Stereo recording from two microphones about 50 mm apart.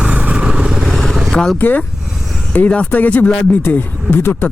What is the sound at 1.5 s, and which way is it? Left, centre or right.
Speech, left.